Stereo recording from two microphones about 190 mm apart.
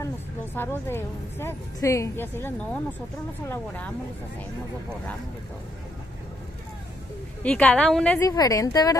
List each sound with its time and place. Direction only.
0.6 s a woman's voice: 10° left (ahead or behind)
7.4 s speech: 5° left (ahead or behind)
8.2 s speech: 20° left (ahead or behind)